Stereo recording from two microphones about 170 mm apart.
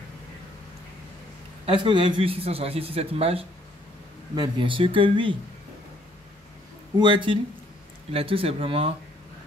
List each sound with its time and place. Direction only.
1.7 s a man's voice: 30° right (ahead or behind)
7.0 s a man's voice: 30° right (ahead or behind)